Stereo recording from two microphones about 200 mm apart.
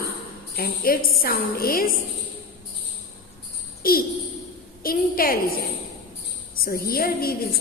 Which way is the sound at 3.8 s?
45° left (ahead or behind).